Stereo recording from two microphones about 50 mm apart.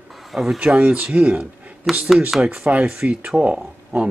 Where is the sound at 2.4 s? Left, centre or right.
Right.